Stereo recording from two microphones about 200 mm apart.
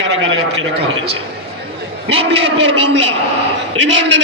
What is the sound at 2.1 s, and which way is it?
A man's voice, 30° right (ahead or behind).